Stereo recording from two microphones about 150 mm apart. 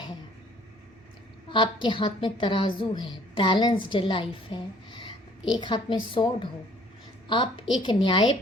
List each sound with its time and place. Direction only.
1.5 s a woman's voice: 30° left (ahead or behind)